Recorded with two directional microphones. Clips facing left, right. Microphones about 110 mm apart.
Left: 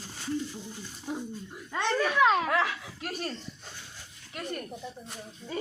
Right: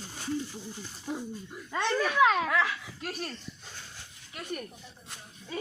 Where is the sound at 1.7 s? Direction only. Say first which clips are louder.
Left 1 dB; centre (ahead or behind).